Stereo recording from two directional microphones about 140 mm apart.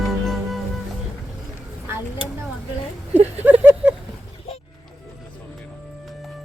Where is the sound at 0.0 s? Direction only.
Centre (ahead or behind).